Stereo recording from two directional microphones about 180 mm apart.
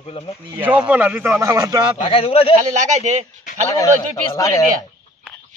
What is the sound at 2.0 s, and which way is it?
Speech, 30° left (ahead or behind).